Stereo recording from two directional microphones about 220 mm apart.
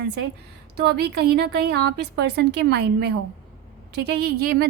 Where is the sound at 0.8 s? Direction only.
50° right (ahead or behind).